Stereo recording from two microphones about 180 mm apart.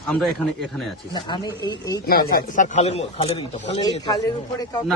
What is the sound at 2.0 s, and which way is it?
Speech, 50° left (ahead or behind).